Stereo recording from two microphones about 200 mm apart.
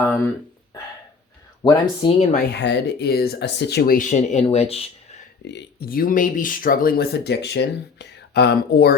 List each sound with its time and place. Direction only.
1.6 s speech: 20° left (ahead or behind)
2.3 s speech: 50° left (ahead or behind); by 5.2 s 30° left (ahead or behind)
5.5 s speech: 55° left (ahead or behind)